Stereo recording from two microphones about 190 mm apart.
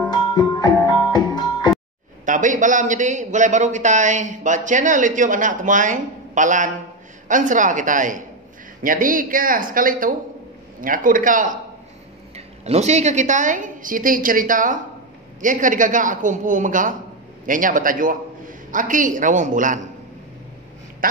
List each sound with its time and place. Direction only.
0.1 s music: 20° left (ahead or behind)
2.2 s a man's voice: 40° right (ahead or behind)
12.4 s a woman's voice: 35° right (ahead or behind)
21.0 s a woman's voice: 45° right (ahead or behind)